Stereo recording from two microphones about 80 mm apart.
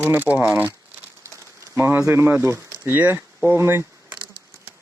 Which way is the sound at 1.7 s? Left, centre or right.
Right.